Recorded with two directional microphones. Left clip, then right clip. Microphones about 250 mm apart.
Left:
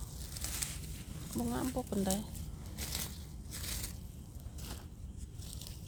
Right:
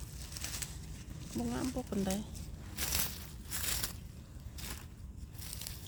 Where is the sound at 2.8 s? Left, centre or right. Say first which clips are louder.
Right 5 dB; right.